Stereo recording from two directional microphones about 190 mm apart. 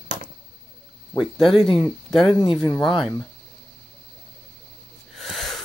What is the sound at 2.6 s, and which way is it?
Speech, 20° left (ahead or behind).